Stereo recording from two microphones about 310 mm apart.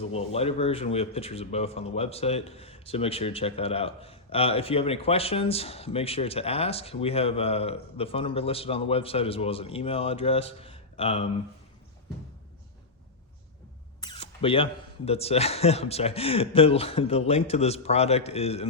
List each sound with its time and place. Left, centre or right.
0.1 s a man's voice: centre
14.0 s a man's voice: centre